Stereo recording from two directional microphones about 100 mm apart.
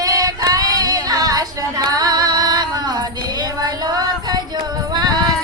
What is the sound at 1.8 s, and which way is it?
Music, 40° right (ahead or behind).